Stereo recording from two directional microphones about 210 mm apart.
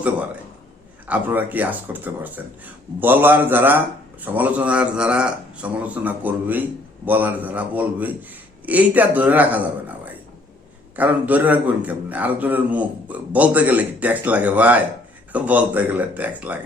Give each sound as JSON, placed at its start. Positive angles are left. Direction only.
{"t": 1.0, "sound": "a man's voice", "side_deg": -5}
{"t": 10.9, "sound": "a man's voice", "side_deg": -10}